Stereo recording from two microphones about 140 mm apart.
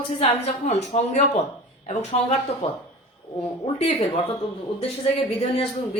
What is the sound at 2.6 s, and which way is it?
Speech, 45° left (ahead or behind).